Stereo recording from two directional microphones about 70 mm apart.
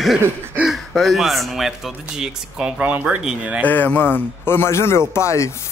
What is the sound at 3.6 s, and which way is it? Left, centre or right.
Speech, left.